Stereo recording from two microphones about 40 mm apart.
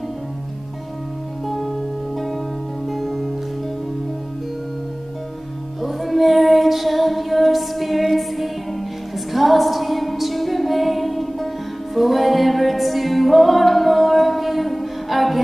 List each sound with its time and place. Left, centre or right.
2.9 s music: centre
5.8 s music: centre